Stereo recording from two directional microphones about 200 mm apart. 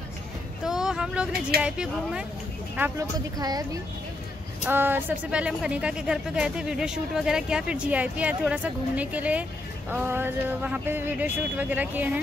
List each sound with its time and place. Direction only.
0.7 s child singing: 5° right (ahead or behind)
1.6 s speech: 5° right (ahead or behind)
4.6 s speech: 10° right (ahead or behind)